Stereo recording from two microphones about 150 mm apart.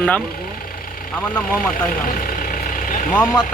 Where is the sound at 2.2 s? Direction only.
65° left (ahead or behind).